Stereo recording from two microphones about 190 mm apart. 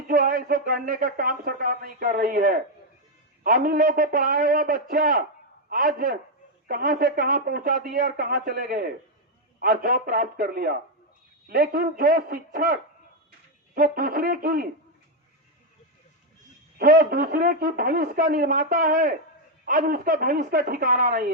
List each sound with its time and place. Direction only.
0.1 s speech: 50° right (ahead or behind)
16.7 s speech: 50° right (ahead or behind)